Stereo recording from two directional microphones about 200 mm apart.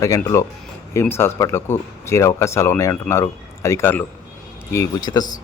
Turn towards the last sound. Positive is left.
turn(degrees=20)  # may be behind; listen again after turning